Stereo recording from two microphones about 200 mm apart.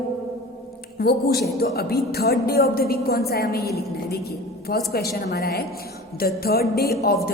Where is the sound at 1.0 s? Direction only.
55° left (ahead or behind).